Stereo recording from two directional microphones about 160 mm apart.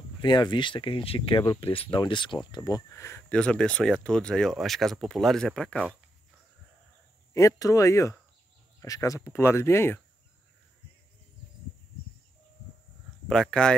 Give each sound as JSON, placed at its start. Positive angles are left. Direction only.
{"t": 0.2, "sound": "speech", "side_deg": 30}
{"t": 7.3, "sound": "speech", "side_deg": 20}
{"t": 13.3, "sound": "speech", "side_deg": 5}